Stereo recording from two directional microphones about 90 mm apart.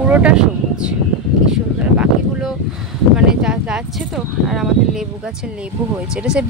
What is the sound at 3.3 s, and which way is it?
Speech, 10° right (ahead or behind).